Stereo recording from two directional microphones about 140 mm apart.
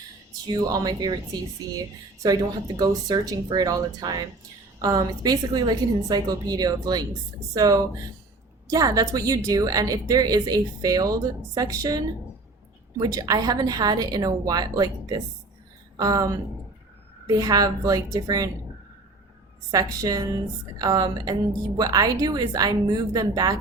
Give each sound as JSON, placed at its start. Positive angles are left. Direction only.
{"t": 0.4, "sound": "a woman's voice", "side_deg": -30}
{"t": 19.7, "sound": "a woman's voice", "side_deg": -25}